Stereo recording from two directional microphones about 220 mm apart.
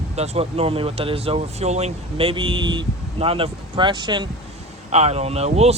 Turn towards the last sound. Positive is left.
turn(degrees=-30)  # may be behind; listen again after turning